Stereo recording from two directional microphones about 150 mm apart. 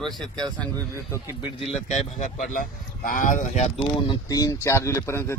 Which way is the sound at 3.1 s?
60° left (ahead or behind).